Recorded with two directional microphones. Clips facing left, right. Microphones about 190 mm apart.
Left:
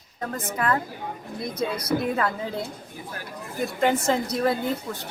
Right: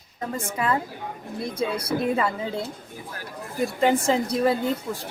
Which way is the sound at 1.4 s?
30° right (ahead or behind).